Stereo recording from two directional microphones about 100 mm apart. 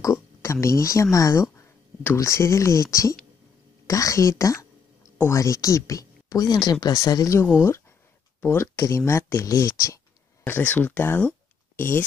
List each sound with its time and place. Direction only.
0.0 s speech: 30° left (ahead or behind)
8.4 s speech: 25° left (ahead or behind)
10.4 s speech: 20° left (ahead or behind)